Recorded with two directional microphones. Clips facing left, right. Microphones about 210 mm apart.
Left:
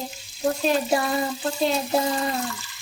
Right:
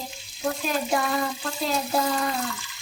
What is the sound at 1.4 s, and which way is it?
Child singing, 25° left (ahead or behind).